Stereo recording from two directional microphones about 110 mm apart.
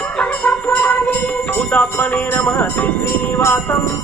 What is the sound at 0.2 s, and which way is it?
Music, 15° left (ahead or behind).